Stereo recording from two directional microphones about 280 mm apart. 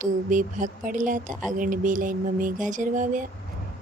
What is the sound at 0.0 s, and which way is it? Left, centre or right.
Speech, right.